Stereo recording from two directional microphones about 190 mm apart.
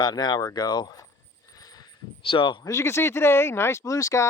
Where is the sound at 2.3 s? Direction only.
25° left (ahead or behind).